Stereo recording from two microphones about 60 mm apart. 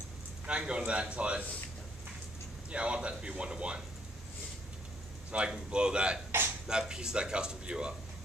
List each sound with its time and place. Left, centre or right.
0.5 s a man's voice: centre
2.7 s a man's voice: centre
5.3 s a man's voice: centre